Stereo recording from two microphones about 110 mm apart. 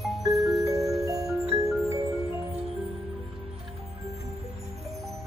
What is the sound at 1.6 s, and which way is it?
Music, 30° right (ahead or behind).